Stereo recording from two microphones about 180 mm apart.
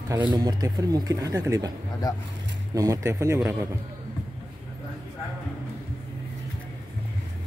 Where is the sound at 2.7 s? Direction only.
20° right (ahead or behind).